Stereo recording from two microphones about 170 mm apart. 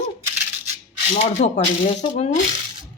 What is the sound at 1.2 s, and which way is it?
Speech, 40° left (ahead or behind).